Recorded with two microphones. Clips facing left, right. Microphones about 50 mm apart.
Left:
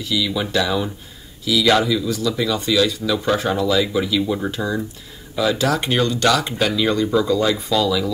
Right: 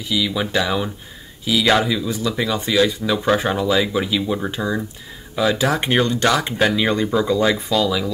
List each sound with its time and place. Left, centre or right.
0.1 s speech: right
5.7 s speech: right